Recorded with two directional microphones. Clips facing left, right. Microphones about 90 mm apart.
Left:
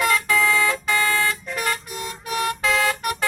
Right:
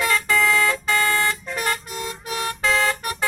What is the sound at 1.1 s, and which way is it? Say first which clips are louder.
Vehicle: even; 30° right (ahead or behind).